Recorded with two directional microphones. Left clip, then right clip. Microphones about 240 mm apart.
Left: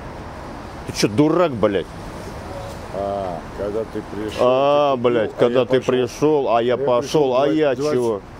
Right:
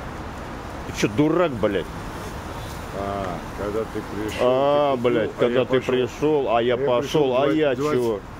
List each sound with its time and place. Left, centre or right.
0.9 s speech: left
4.4 s speech: left